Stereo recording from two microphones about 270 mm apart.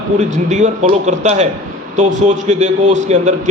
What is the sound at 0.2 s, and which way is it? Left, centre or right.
A man's voice, right.